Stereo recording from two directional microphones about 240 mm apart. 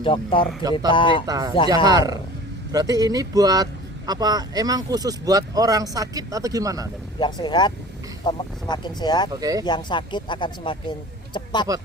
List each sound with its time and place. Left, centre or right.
0.0 s speech: left
0.6 s speech: centre
0.9 s speech: left
1.3 s speech: centre
7.2 s speech: centre
9.3 s speech: centre
9.6 s speech: centre